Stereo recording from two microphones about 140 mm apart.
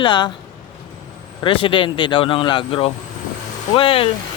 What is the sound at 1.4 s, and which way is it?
Speech, 40° left (ahead or behind).